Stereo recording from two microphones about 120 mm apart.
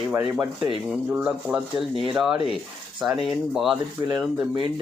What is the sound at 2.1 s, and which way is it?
Speech, 5° right (ahead or behind).